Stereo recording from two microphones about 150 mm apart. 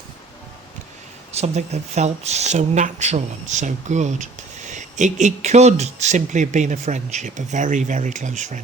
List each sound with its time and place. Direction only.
1.3 s speech: 45° right (ahead or behind)